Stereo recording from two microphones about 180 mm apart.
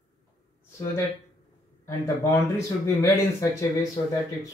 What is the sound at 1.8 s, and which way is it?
Speech, 15° left (ahead or behind).